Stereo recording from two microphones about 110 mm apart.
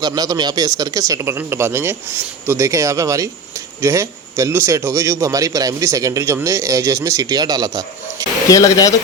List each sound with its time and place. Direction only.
0.0 s speech: 35° right (ahead or behind)
8.4 s speech: 30° left (ahead or behind)